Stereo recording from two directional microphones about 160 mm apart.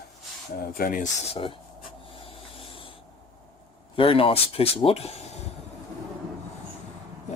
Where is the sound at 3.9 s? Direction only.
35° left (ahead or behind).